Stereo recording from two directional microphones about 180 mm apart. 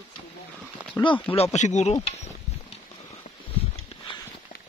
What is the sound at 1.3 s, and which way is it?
Speech, 35° left (ahead or behind).